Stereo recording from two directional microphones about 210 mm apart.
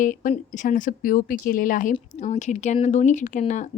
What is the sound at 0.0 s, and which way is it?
Speech, 40° left (ahead or behind).